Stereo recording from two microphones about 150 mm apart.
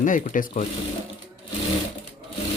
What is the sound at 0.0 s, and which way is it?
Speech, 60° left (ahead or behind).